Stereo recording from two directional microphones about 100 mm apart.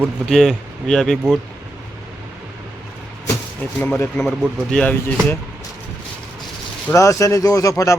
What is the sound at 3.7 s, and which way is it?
Speech, 10° left (ahead or behind).